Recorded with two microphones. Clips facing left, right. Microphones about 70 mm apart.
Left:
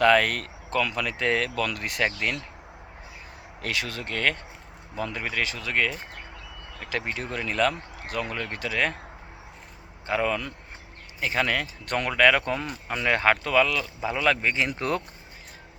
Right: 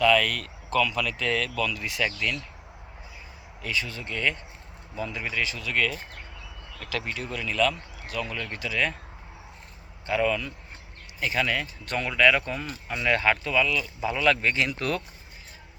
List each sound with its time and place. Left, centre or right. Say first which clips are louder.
0.0 s speech: left 2 dB; left
0.9 s speech: left 2 dB; left
1.5 s speech: left 1 dB; left
2.0 s speech: left 2 dB; left
3.6 s speech: left 1 dB; left
5.7 s speech: left 1 dB; centre
7.2 s speech: even; left
10.1 s speech: right 1 dB; left
11.9 s speech: left 1 dB; left
13.1 s speech: left 1 dB; left
14.0 s speech: even; left
14.8 s speech: left 1 dB; left